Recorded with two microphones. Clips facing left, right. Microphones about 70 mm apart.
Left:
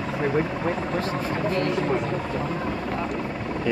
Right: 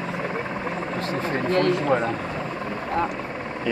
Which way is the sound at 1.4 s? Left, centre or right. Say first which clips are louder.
Right 5 dB; right.